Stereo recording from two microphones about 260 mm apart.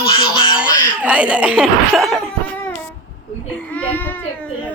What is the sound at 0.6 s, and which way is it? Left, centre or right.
Speech, centre.